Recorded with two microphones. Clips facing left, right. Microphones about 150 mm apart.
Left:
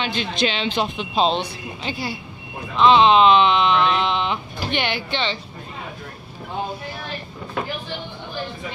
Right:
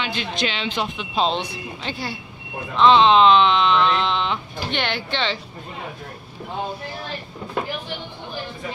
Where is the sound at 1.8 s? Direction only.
10° left (ahead or behind).